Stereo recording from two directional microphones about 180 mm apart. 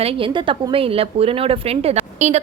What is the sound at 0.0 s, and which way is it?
A woman's voice, 30° right (ahead or behind).